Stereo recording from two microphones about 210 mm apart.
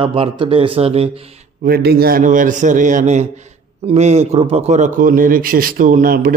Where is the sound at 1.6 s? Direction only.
45° right (ahead or behind).